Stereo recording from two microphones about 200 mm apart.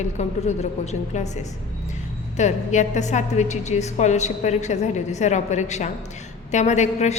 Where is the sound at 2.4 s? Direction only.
35° left (ahead or behind).